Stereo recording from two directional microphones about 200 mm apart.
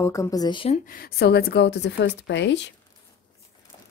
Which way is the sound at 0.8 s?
50° left (ahead or behind).